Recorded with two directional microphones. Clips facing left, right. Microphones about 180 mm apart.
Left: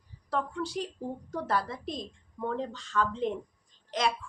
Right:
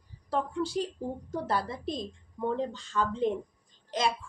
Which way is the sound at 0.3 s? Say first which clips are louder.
Right 2 dB; 30° right (ahead or behind).